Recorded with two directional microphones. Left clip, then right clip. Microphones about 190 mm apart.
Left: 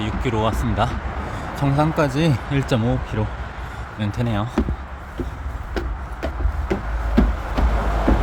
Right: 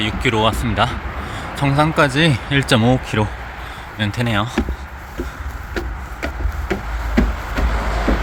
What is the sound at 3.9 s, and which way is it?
Speech, 5° left (ahead or behind).